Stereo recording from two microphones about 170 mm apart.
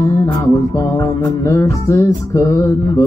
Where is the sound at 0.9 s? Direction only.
20° left (ahead or behind).